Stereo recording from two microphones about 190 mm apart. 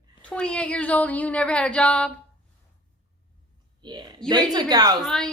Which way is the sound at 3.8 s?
25° right (ahead or behind).